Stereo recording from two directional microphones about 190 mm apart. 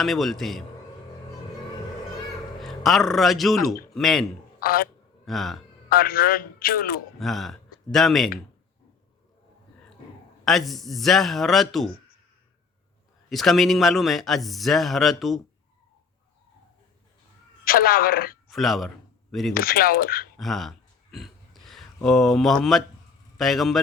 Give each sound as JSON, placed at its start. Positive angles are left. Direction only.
{"t": 0.0, "sound": "a man's voice", "side_deg": 0}
{"t": 2.6, "sound": "a man's voice", "side_deg": 0}
{"t": 4.6, "sound": "a man's voice", "side_deg": 50}
{"t": 5.2, "sound": "speech", "side_deg": 0}
{"t": 5.9, "sound": "a man's voice", "side_deg": 50}
{"t": 7.2, "sound": "speech", "side_deg": 0}
{"t": 10.4, "sound": "a man's voice", "side_deg": 0}
{"t": 13.3, "sound": "a man's voice", "side_deg": 0}
{"t": 17.7, "sound": "a man's voice", "side_deg": 50}
{"t": 18.4, "sound": "speech", "side_deg": 0}
{"t": 19.5, "sound": "a man's voice", "side_deg": 50}
{"t": 20.3, "sound": "a sound", "side_deg": 0}
{"t": 22.0, "sound": "a man's voice", "side_deg": 0}